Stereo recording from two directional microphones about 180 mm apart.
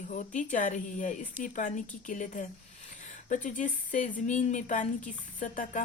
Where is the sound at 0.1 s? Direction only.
45° left (ahead or behind).